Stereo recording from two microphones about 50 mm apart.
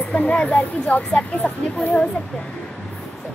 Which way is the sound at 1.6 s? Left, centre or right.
Left.